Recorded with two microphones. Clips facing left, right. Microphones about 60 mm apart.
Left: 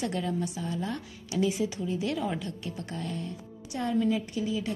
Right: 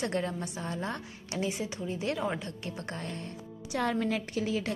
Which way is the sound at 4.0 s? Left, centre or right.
Right.